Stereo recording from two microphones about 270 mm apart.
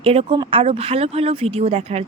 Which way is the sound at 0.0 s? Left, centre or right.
Right.